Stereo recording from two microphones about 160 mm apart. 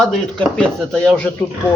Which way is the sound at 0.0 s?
5° left (ahead or behind).